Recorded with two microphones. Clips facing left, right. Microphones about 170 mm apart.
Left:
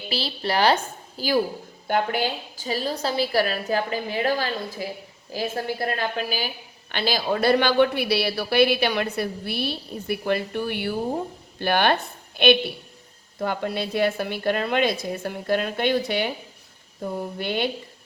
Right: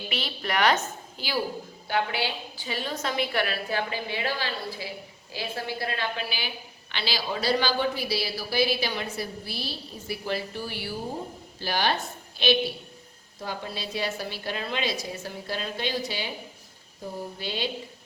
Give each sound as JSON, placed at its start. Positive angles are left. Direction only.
{"t": 0.1, "sound": "a woman's voice", "side_deg": 30}
{"t": 1.9, "sound": "a woman's voice", "side_deg": 45}